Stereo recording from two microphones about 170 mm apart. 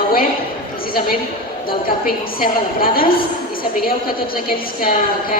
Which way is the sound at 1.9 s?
60° left (ahead or behind).